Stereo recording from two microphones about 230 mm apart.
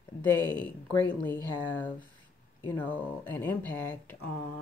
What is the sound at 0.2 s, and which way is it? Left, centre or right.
Speech, centre.